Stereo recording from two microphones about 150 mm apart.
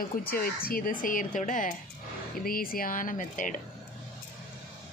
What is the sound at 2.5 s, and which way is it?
Speech, 75° left (ahead or behind).